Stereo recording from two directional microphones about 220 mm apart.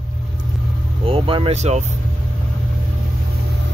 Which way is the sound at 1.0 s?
25° right (ahead or behind).